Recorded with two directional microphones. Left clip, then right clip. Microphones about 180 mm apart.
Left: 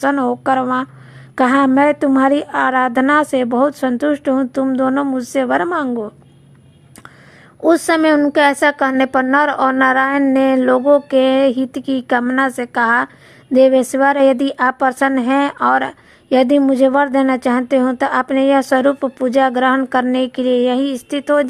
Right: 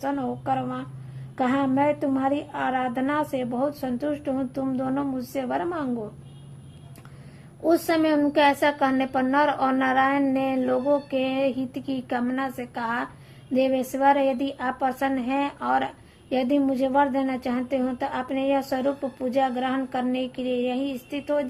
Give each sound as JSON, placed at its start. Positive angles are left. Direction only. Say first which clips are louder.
{"t": 0.0, "sound": "a woman's voice", "louder": "left 12 dB", "side_deg": 45}
{"t": 7.6, "sound": "a woman's voice", "louder": "left 9 dB", "side_deg": 45}